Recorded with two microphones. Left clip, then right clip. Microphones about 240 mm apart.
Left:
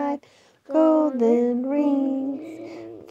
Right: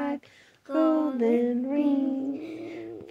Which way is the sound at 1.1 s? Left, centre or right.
Left.